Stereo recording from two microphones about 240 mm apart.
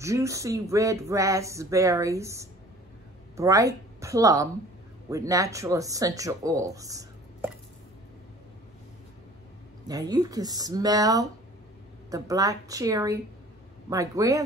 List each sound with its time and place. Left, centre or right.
0.0 s a woman's voice: centre
9.8 s speech: centre